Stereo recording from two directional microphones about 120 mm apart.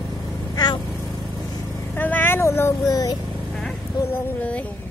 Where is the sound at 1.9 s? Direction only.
15° left (ahead or behind).